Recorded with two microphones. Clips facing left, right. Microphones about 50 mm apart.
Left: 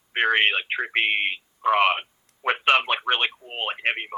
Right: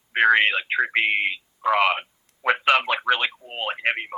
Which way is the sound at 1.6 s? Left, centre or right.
Right.